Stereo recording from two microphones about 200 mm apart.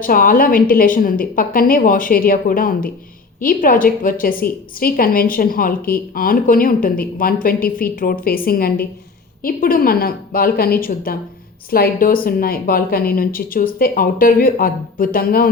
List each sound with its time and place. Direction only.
0.0 s a woman's voice: 45° left (ahead or behind)